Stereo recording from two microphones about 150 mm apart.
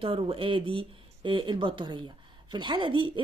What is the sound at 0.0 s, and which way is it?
Speech, 35° right (ahead or behind).